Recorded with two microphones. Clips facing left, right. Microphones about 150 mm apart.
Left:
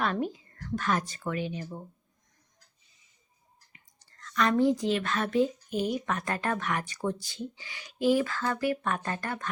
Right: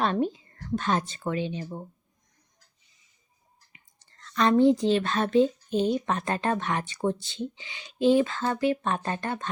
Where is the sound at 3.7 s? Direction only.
25° right (ahead or behind).